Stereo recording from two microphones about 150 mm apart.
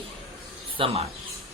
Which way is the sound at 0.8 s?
35° right (ahead or behind).